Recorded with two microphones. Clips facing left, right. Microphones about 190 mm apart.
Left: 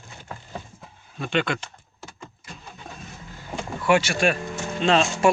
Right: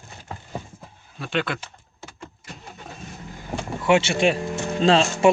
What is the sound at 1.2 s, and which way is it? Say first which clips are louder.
Speech: left 2 dB; centre (ahead or behind).